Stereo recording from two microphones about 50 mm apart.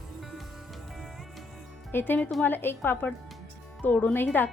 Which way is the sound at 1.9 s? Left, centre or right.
Left.